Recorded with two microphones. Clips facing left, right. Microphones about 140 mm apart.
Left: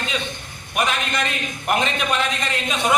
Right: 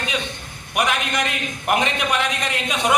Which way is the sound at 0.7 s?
15° right (ahead or behind).